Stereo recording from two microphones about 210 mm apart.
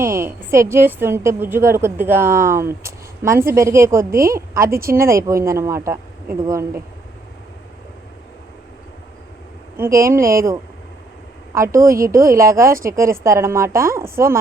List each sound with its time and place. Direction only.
0.0 s a woman's voice: 10° right (ahead or behind)
9.7 s a woman's voice: 10° right (ahead or behind)